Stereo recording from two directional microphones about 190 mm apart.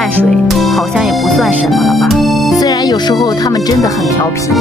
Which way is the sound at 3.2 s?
20° left (ahead or behind).